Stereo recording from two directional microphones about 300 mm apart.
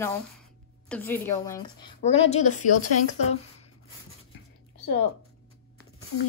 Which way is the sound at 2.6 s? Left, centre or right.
Left.